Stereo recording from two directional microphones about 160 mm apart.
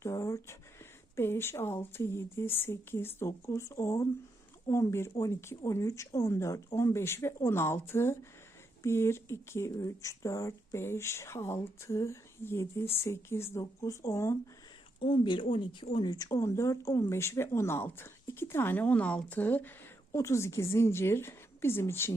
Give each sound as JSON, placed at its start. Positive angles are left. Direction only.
{"t": 0.0, "sound": "a sound", "side_deg": 20}
{"t": 1.1, "sound": "speech", "side_deg": 15}
{"t": 15.0, "sound": "speech", "side_deg": 30}